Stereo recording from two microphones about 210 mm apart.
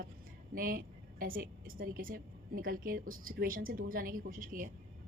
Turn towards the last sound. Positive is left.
turn(degrees=-40)  # may be behind; listen again after turning